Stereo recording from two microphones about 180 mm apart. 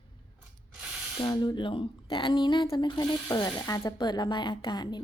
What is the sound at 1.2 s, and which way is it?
Speech, 20° left (ahead or behind).